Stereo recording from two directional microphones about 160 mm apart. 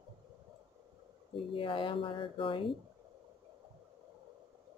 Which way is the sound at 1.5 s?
30° left (ahead or behind).